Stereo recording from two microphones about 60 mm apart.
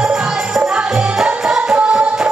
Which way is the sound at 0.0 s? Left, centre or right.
Centre.